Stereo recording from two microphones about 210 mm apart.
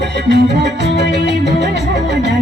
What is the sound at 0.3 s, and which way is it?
Music, 55° right (ahead or behind).